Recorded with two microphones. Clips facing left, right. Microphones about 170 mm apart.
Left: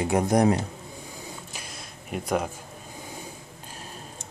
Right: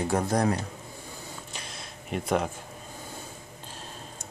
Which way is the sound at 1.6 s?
Centre (ahead or behind).